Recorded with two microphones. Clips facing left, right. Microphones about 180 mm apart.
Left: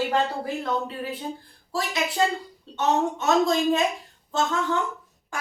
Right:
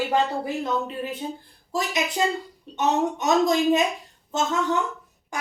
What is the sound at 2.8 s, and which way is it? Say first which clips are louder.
Speech: right 1 dB; 15° right (ahead or behind).